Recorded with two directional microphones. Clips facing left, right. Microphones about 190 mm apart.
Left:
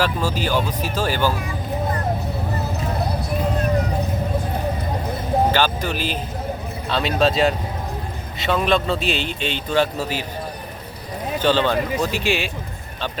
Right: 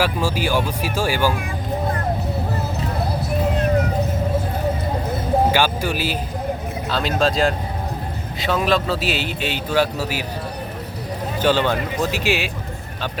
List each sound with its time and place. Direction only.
0.0 s a man's voice: 10° right (ahead or behind)
5.5 s a man's voice: 10° right (ahead or behind)
11.4 s a man's voice: 10° right (ahead or behind)